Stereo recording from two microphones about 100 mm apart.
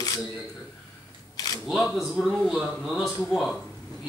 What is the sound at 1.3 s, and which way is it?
Camera, 35° left (ahead or behind).